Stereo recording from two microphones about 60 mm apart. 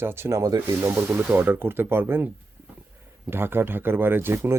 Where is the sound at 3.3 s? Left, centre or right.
Right.